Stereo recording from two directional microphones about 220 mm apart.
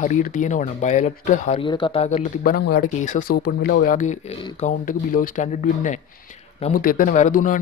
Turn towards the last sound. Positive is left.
turn(degrees=35)  # may be behind; listen again after turning